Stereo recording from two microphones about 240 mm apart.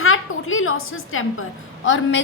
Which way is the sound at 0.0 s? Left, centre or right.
Left.